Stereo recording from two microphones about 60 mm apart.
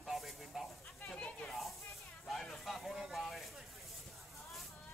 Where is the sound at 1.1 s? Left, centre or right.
Centre.